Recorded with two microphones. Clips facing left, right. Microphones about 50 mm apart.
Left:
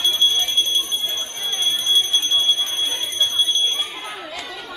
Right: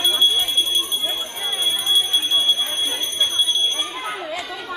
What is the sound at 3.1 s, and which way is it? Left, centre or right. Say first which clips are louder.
Clip-clop: left 1 dB; centre.